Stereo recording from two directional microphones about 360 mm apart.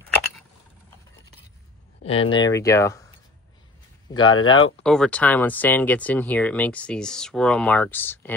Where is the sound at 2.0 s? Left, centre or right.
Centre.